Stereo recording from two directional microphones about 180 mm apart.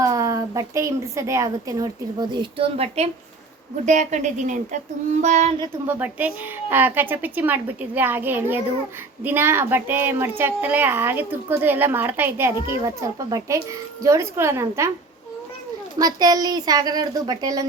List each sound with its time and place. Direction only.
0.0 s a woman's voice: 20° right (ahead or behind); by 4.8 s 45° right (ahead or behind)
5.2 s child singing: 40° right (ahead or behind)
5.9 s a woman's voice: 10° right (ahead or behind)
16.0 s a woman's voice: 20° right (ahead or behind)